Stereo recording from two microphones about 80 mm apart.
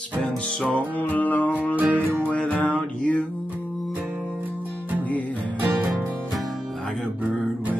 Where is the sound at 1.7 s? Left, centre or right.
Centre.